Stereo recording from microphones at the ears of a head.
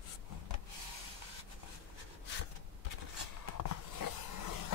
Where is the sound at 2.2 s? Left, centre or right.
Left.